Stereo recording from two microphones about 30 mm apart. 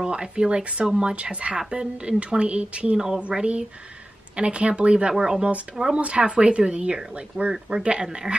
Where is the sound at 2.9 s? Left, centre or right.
Right.